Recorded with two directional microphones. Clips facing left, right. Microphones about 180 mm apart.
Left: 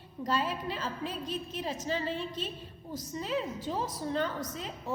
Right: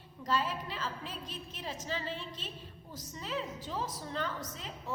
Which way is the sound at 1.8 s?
20° left (ahead or behind).